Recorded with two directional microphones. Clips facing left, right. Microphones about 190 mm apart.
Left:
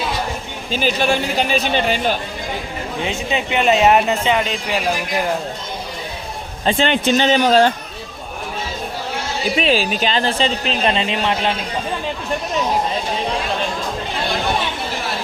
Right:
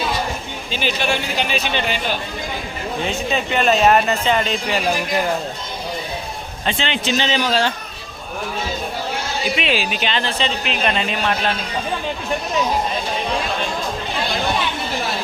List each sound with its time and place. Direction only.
0.7 s speech: 40° left (ahead or behind)
3.3 s speech: 15° left (ahead or behind)
6.7 s speech: 45° left (ahead or behind)
9.6 s speech: 40° left (ahead or behind); by 11.5 s 20° left (ahead or behind)